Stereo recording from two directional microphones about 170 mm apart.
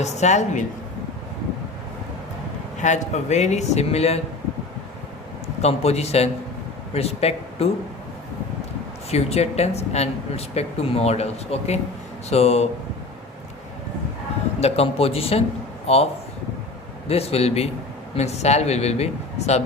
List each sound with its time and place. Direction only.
0.0 s a woman's voice: 40° left (ahead or behind)
2.8 s speech: 45° left (ahead or behind)
5.6 s speech: 40° left (ahead or behind)
9.0 s speech: 40° left (ahead or behind)
14.6 s speech: 35° left (ahead or behind)
17.1 s speech: 35° left (ahead or behind)